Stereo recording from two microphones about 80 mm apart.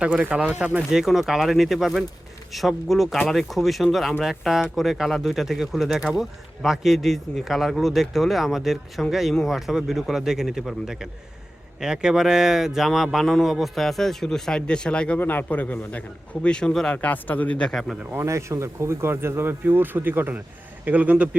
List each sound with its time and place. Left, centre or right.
0.0 s speech: centre
15.2 s a man's voice: left
17.7 s speech: centre
18.0 s speech: right
18.3 s speech: right; by 21.2 s centre